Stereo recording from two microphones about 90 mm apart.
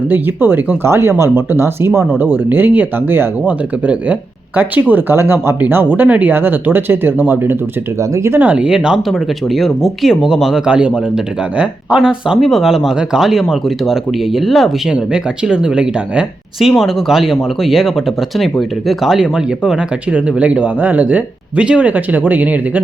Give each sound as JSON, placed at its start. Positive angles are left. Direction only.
{"t": 0.1, "sound": "speech", "side_deg": -25}